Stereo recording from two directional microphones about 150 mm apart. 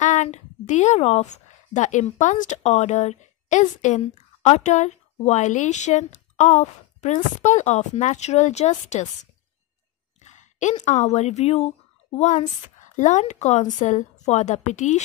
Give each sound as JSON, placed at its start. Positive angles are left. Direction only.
{"t": 0.0, "sound": "a woman's voice", "side_deg": 50}